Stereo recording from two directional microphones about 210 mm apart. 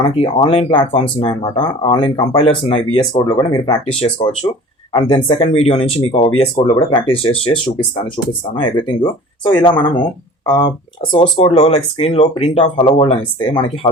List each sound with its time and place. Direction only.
0.0 s speech: 25° left (ahead or behind)
11.1 s speech: 30° left (ahead or behind)